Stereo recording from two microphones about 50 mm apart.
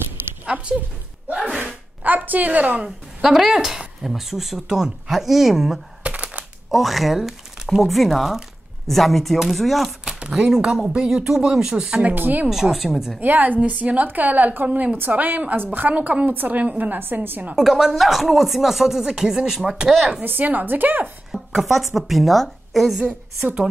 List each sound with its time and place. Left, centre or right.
0.5 s a woman's voice: centre
1.7 s speech: right
3.2 s speech: centre
6.0 s computer keyboard: right
6.7 s speech: centre
10.0 s speech: centre
12.0 s a woman's voice: right
12.7 s a woman's voice: centre
13.2 s a woman's voice: right
17.0 s a woman's voice: right
17.6 s speech: centre
20.2 s a woman's voice: right
21.3 s a woman's voice: centre
22.9 s a woman's voice: centre